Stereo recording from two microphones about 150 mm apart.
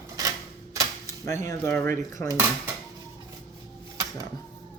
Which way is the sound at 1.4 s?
15° left (ahead or behind).